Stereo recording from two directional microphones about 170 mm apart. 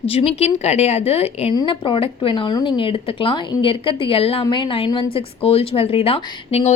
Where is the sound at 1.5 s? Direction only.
25° left (ahead or behind).